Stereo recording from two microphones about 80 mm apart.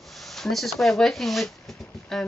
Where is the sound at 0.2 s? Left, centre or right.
Centre.